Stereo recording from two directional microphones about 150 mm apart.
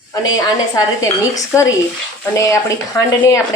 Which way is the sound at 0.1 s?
25° left (ahead or behind).